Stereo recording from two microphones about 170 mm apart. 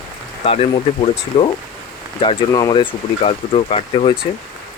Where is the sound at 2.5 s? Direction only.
25° left (ahead or behind).